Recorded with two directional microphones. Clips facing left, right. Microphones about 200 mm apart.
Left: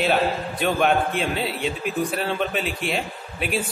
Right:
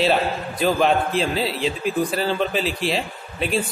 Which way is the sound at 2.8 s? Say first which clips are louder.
Right 3 dB; 35° right (ahead or behind).